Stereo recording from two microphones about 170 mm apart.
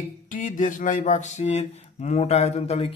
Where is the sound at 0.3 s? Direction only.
50° left (ahead or behind).